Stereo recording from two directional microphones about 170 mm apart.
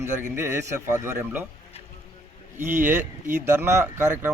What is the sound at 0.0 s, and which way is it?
Speech, 15° right (ahead or behind).